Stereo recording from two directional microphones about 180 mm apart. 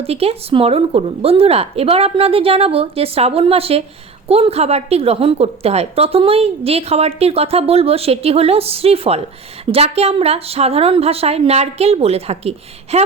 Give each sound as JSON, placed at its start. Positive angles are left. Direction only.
{"t": 0.0, "sound": "a woman's voice", "side_deg": -35}